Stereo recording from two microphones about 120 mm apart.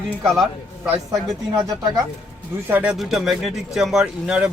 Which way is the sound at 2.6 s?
15° right (ahead or behind).